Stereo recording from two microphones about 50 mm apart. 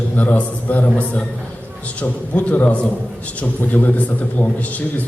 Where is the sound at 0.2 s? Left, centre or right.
Left.